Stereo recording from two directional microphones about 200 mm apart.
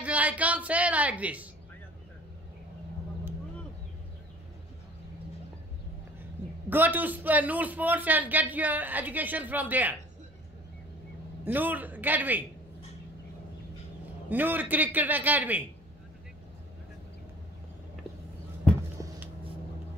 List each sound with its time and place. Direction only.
0.0 s a man's voice: 5° right (ahead or behind)
6.7 s a man's voice: 10° right (ahead or behind)
11.4 s a man's voice: 10° right (ahead or behind)
14.3 s a man's voice: 10° right (ahead or behind)